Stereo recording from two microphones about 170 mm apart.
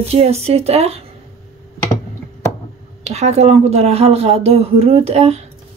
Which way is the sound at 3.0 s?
40° right (ahead or behind).